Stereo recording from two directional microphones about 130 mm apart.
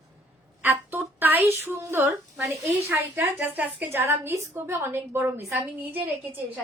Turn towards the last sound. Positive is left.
turn(degrees=-15)  # may be behind; listen again after turning